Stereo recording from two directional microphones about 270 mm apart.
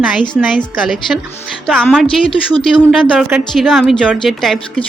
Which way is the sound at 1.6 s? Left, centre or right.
Centre.